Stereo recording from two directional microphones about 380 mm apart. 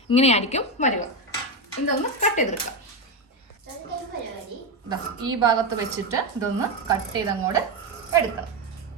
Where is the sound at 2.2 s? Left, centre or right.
Centre.